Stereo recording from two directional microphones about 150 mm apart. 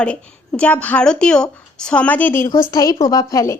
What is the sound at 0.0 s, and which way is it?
A woman's voice, 5° left (ahead or behind).